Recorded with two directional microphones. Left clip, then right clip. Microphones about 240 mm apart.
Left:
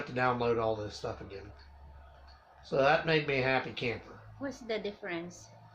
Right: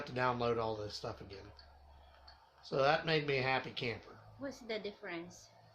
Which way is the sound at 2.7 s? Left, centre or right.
Right.